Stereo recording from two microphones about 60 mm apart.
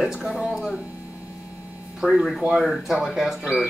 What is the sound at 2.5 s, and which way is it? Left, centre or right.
Speech, centre.